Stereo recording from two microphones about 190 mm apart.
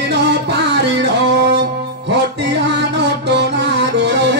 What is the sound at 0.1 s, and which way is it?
Music, 65° right (ahead or behind).